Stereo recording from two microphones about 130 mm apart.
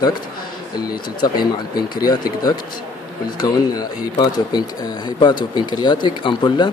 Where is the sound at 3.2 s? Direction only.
30° left (ahead or behind).